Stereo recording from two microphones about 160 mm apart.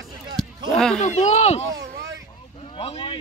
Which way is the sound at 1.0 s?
45° left (ahead or behind).